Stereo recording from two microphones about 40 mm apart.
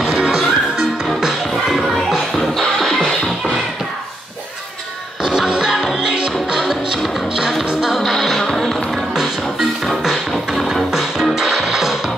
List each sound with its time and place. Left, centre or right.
0.2 s music: centre
2.3 s music: centre
5.2 s music: centre
5.5 s music: centre
6.6 s music: centre
10.3 s music: centre